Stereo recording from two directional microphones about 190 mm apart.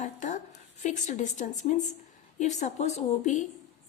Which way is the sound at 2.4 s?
40° left (ahead or behind).